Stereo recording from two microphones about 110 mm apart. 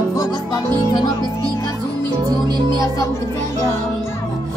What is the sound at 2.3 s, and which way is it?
Music, 40° right (ahead or behind).